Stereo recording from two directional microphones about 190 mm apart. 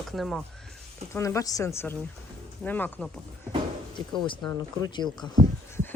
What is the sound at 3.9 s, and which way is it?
Speech, 25° left (ahead or behind).